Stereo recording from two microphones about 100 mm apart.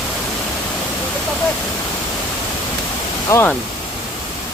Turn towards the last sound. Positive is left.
turn(degrees=25)  # may be behind; listen again after turning